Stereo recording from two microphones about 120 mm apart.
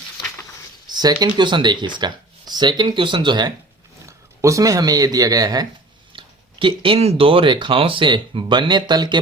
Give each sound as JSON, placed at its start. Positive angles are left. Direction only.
{"t": 0.9, "sound": "speech", "side_deg": -35}
{"t": 4.0, "sound": "speech", "side_deg": -25}
{"t": 6.1, "sound": "speech", "side_deg": -45}